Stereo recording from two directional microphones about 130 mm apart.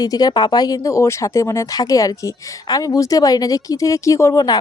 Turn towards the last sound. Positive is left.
turn(degrees=30)  # may be behind; listen again after turning